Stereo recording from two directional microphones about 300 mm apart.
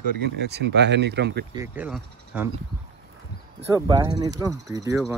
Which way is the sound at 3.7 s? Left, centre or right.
Centre.